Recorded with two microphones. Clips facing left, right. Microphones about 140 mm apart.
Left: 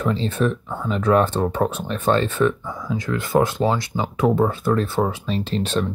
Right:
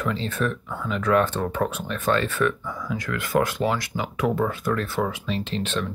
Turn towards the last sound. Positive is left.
turn(degrees=40)  # may be behind; listen again after turning